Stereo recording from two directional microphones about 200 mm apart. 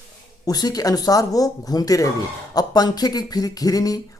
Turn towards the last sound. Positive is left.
turn(degrees=20)  # may be behind; listen again after turning